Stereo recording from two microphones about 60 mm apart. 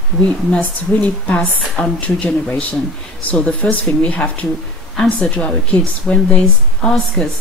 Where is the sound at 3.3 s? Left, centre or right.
Centre.